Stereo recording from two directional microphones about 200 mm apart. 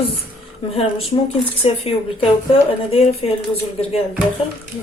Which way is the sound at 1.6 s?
30° left (ahead or behind).